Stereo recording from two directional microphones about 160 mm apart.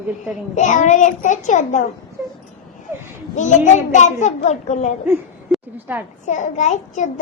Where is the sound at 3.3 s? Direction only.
50° left (ahead or behind).